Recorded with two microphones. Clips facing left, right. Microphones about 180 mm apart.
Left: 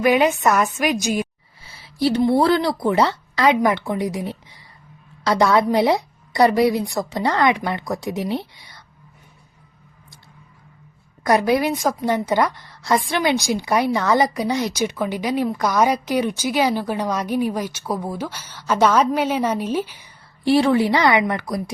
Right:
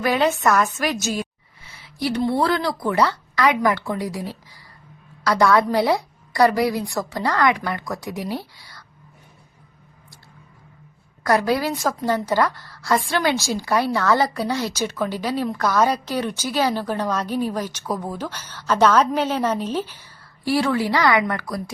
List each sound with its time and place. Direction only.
0.0 s a woman's voice: 15° left (ahead or behind)
1.6 s a sound: 30° left (ahead or behind)
2.2 s a woman's voice: 20° left (ahead or behind)
11.2 s a woman's voice: 20° left (ahead or behind)
20.4 s a woman's voice: 25° left (ahead or behind)